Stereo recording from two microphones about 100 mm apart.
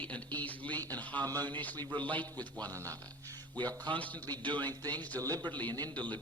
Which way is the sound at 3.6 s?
45° right (ahead or behind).